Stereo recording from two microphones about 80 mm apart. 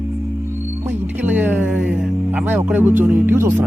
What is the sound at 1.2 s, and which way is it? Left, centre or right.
Speech, right.